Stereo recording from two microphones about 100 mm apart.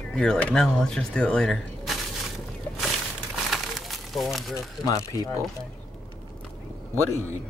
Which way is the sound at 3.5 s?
Centre (ahead or behind).